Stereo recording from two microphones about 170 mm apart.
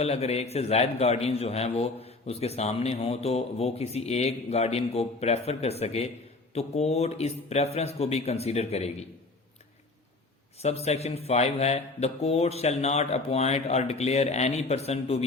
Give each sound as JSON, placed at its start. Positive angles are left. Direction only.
{"t": 0.0, "sound": "a man's voice", "side_deg": 40}
{"t": 10.6, "sound": "a man's voice", "side_deg": 40}